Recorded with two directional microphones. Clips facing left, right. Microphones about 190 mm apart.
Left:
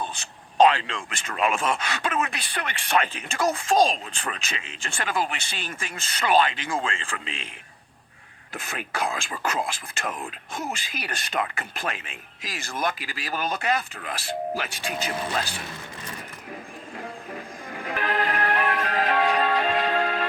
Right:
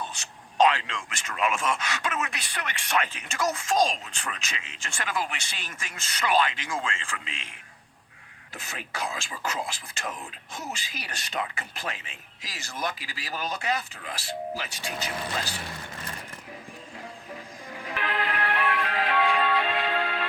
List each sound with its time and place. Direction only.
0.0 s speech: 30° left (ahead or behind)
8.5 s speech: 55° left (ahead or behind)
17.0 s music: 55° left (ahead or behind)